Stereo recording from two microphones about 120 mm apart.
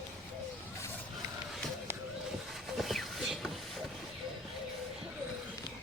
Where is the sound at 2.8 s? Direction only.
Centre (ahead or behind).